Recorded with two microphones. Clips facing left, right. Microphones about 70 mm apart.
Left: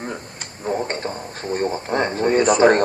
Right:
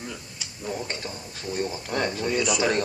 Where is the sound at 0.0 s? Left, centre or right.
Left.